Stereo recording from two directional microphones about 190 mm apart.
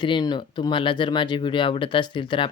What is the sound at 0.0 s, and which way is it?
Speech, 25° left (ahead or behind).